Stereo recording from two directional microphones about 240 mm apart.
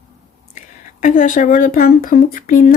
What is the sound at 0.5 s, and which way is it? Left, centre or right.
Speech, left.